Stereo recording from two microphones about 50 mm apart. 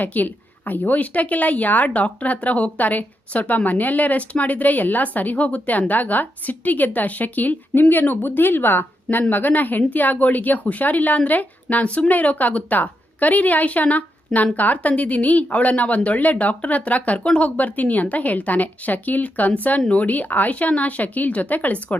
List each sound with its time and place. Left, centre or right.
0.0 s speech: left